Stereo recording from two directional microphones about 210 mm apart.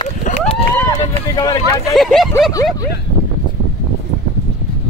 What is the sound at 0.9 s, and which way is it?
Run, 20° left (ahead or behind).